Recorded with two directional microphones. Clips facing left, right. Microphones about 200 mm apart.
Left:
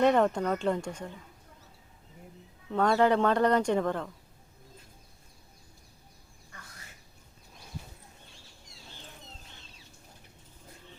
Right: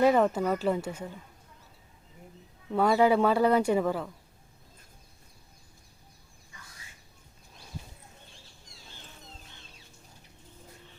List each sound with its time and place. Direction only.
0.0 s speech: 5° right (ahead or behind)
2.7 s speech: 5° right (ahead or behind)